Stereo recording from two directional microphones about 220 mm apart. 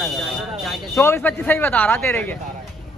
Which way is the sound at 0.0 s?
Centre (ahead or behind).